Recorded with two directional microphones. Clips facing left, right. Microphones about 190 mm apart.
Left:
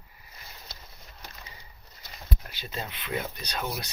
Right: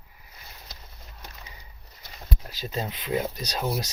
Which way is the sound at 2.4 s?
40° right (ahead or behind).